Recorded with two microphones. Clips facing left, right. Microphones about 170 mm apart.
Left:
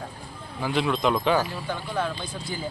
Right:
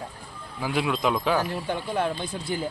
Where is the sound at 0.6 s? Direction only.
5° right (ahead or behind).